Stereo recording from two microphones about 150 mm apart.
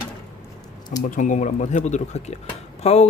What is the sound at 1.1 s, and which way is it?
Speech, 55° left (ahead or behind).